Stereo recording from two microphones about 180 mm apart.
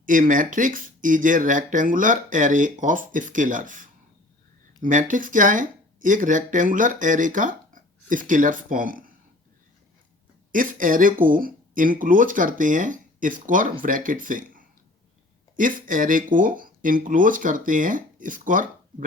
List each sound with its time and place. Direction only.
0.0 s speech: 50° right (ahead or behind)
10.5 s speech: 50° right (ahead or behind)